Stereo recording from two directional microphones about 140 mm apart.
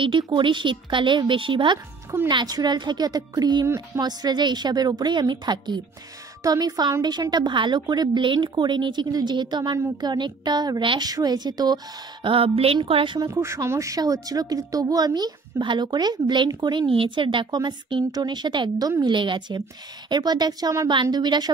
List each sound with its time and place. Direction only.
0.0 s a woman's voice: 35° right (ahead or behind)
13.3 s a woman's voice: 20° right (ahead or behind)